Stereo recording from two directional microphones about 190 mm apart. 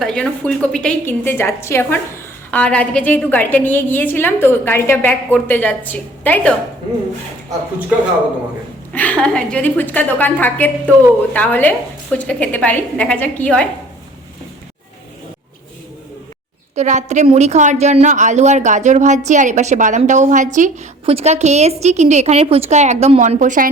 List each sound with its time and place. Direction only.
0.0 s a woman's voice: 5° left (ahead or behind)
8.9 s a woman's voice: 5° left (ahead or behind)
16.7 s a woman's voice: 40° right (ahead or behind)